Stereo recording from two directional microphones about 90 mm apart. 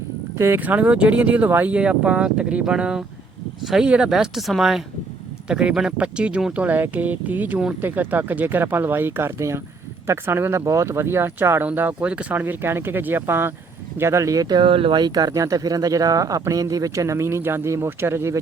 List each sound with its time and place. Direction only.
0.3 s speech: 30° right (ahead or behind)
0.6 s speech: 15° right (ahead or behind); by 14.6 s 45° right (ahead or behind)
14.6 s speech: 75° right (ahead or behind)
15.0 s speech: 50° right (ahead or behind); by 18.3 s 30° right (ahead or behind)